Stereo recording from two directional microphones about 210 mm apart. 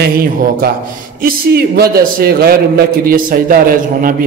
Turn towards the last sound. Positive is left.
turn(degrees=-45)  # may be behind; listen again after turning